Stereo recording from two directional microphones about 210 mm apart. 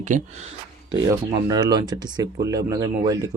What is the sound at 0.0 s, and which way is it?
Speech, 35° right (ahead or behind).